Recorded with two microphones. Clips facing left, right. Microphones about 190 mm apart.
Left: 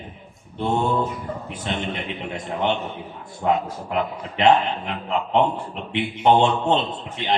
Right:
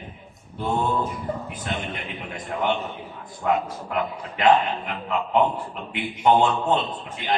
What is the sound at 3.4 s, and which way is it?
Speech, 30° left (ahead or behind).